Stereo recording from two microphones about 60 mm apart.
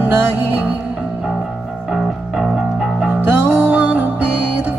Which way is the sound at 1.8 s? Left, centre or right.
Centre.